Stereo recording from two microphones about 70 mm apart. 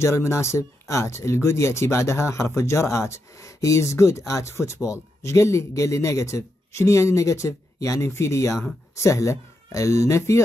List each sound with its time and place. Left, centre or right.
0.0 s speech: left